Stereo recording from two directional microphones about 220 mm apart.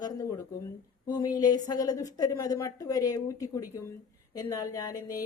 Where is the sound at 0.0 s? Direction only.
15° left (ahead or behind).